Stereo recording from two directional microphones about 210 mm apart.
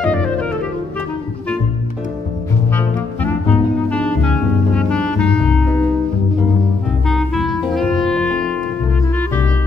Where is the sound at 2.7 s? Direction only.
5° left (ahead or behind).